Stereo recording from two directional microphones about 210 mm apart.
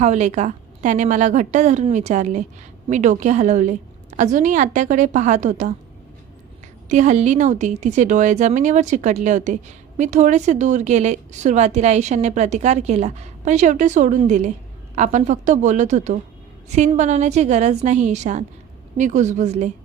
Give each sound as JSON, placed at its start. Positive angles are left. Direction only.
{"t": 0.0, "sound": "a woman's voice", "side_deg": -35}
{"t": 6.8, "sound": "a woman's voice", "side_deg": -35}